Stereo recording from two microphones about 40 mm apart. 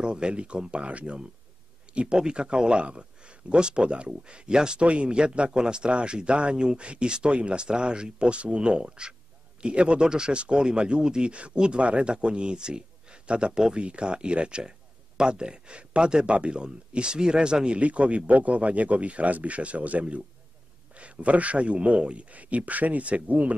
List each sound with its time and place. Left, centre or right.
0.0 s speech: right
13.7 s speech: right